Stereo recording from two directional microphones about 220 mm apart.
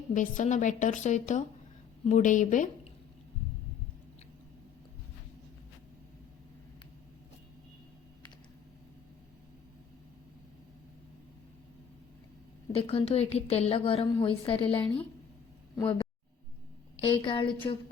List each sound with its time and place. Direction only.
0.1 s a woman's voice: 35° left (ahead or behind)
12.7 s a woman's voice: 25° left (ahead or behind)